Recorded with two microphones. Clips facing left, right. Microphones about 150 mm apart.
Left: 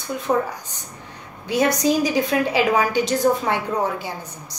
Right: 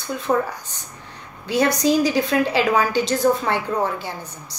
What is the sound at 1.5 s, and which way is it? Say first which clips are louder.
A woman's voice: even; 15° left (ahead or behind).